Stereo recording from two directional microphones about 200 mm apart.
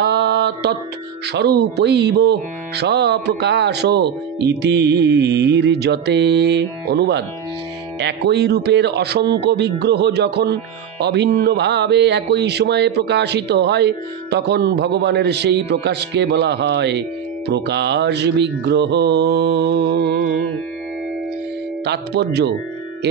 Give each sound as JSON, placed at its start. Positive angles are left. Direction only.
{"t": 0.0, "sound": "mantra", "side_deg": -55}
{"t": 1.3, "sound": "speech", "side_deg": -55}
{"t": 21.8, "sound": "speech", "side_deg": -55}